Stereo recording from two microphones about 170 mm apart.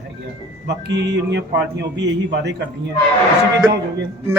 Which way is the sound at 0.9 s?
90° right.